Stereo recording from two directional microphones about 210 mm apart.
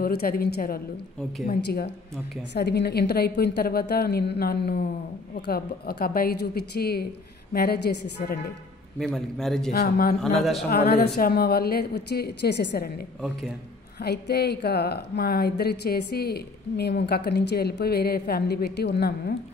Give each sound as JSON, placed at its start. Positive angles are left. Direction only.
{"t": 0.0, "sound": "a woman's voice", "side_deg": 45}
{"t": 8.9, "sound": "a man's voice", "side_deg": 0}
{"t": 9.7, "sound": "a woman's voice", "side_deg": 45}